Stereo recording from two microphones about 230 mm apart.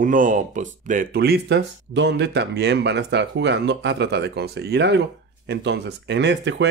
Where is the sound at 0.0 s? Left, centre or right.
Right.